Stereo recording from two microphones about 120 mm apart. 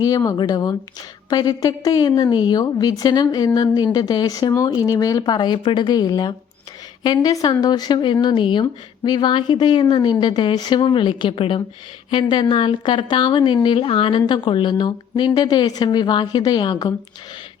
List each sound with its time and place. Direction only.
0.0 s a woman's voice: 30° left (ahead or behind)